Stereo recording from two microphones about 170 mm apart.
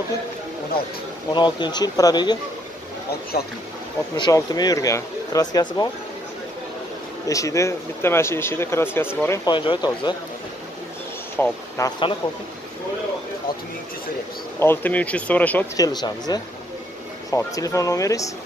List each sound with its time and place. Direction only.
1.3 s speech: 25° left (ahead or behind)
3.3 s speech: 65° left (ahead or behind)
4.2 s speech: 25° left (ahead or behind)
7.2 s speech: 20° left (ahead or behind)
9.5 s speech: 30° left (ahead or behind)
11.4 s speech: 10° left (ahead or behind)
14.6 s speech: 10° left (ahead or behind)
15.7 s speech: 20° left (ahead or behind)